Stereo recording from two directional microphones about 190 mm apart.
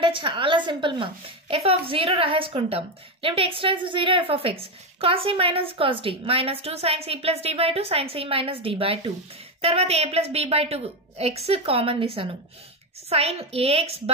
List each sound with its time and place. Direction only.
0.0 s a woman's voice: 25° right (ahead or behind)